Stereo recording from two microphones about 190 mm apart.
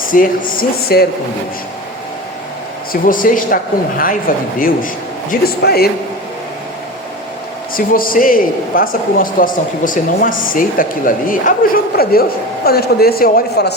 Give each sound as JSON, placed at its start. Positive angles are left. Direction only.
{"t": 0.1, "sound": "a man's voice", "side_deg": 45}
{"t": 2.9, "sound": "a man's voice", "side_deg": 45}
{"t": 5.3, "sound": "a man's voice", "side_deg": 55}
{"t": 7.8, "sound": "a man's voice", "side_deg": 50}